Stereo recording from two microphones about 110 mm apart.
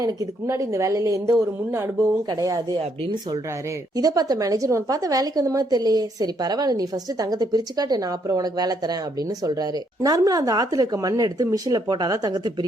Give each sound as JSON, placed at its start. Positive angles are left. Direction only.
{"t": 0.0, "sound": "a woman's voice", "side_deg": -30}
{"t": 3.9, "sound": "a woman's voice", "side_deg": -35}